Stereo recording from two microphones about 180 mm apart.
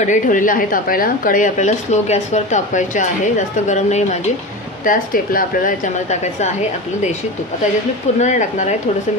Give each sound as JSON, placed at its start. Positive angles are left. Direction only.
{"t": 0.0, "sound": "a woman's voice", "side_deg": 45}
{"t": 8.2, "sound": "a woman's voice", "side_deg": 45}